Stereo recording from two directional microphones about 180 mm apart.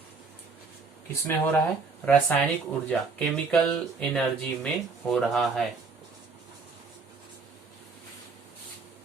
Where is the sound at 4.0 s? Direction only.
5° left (ahead or behind).